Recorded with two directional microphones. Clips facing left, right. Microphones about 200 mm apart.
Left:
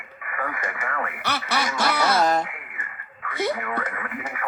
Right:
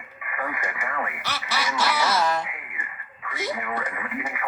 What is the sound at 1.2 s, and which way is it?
Quack, 60° left (ahead or behind).